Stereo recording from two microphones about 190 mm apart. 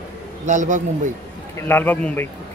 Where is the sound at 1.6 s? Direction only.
10° left (ahead or behind).